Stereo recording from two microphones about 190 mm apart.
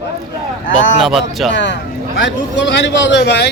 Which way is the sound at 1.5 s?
65° left (ahead or behind).